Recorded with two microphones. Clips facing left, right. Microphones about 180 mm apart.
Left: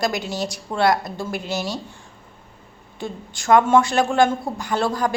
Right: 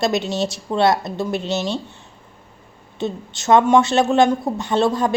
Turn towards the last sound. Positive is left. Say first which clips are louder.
# right 4 dB
turn(degrees=-25)  # may be behind; listen again after turning